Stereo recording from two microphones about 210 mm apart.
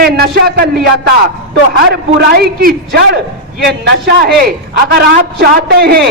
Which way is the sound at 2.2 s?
50° right (ahead or behind).